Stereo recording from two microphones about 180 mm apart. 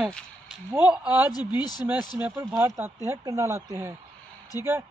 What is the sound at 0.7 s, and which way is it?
Speech, 10° right (ahead or behind).